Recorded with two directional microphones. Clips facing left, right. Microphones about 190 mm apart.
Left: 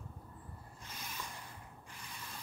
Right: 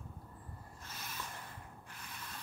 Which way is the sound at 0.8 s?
15° left (ahead or behind).